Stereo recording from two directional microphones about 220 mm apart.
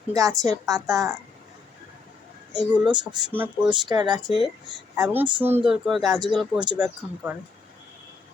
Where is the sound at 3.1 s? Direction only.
20° right (ahead or behind).